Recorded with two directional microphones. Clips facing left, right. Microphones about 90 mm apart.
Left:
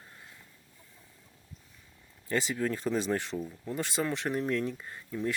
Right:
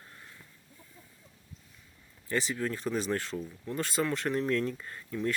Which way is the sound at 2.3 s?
25° left (ahead or behind).